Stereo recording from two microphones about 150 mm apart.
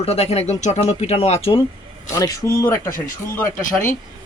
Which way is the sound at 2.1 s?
20° left (ahead or behind).